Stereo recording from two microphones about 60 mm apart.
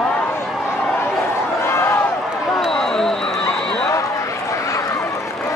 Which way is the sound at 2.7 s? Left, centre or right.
Centre.